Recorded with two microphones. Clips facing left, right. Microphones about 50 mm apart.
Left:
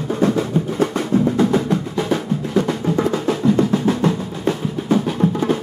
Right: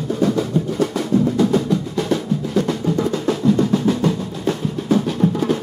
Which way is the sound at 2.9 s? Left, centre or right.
Left.